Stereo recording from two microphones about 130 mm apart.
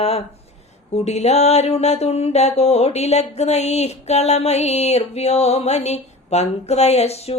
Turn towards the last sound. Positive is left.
turn(degrees=55)  # may be behind; listen again after turning